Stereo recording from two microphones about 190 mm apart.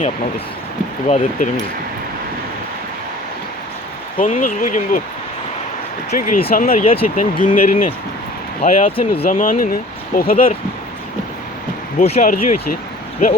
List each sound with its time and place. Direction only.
1.0 s speech: 35° left (ahead or behind)
4.2 s speech: 45° left (ahead or behind)
6.1 s speech: 35° left (ahead or behind)
6.5 s speech: 50° left (ahead or behind)
6.8 s speech: 30° left (ahead or behind)
7.4 s speech: 45° left (ahead or behind)
9.0 s speech: 30° left (ahead or behind)
9.3 s speech: 45° left (ahead or behind)
11.9 s speech: 40° left (ahead or behind)